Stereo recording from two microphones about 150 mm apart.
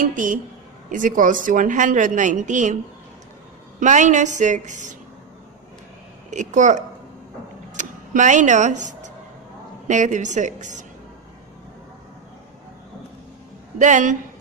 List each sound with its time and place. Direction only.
0.0 s a woman's voice: 60° right (ahead or behind)
3.8 s a woman's voice: 55° right (ahead or behind)
6.3 s a woman's voice: 55° right (ahead or behind)
13.7 s a woman's voice: 55° right (ahead or behind)